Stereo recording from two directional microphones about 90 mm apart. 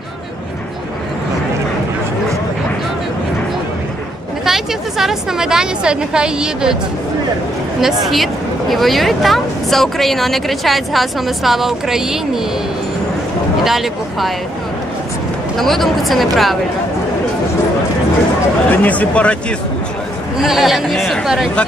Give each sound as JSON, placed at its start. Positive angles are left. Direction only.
{"t": 4.5, "sound": "a woman's voice", "side_deg": -5}
{"t": 7.8, "sound": "speech", "side_deg": 0}
{"t": 13.7, "sound": "speech", "side_deg": 0}
{"t": 15.5, "sound": "speech", "side_deg": 0}
{"t": 18.7, "sound": "speech", "side_deg": 15}
{"t": 20.4, "sound": "speech", "side_deg": -5}